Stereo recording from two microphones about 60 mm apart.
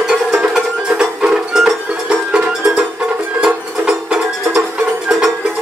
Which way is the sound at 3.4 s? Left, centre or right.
Centre.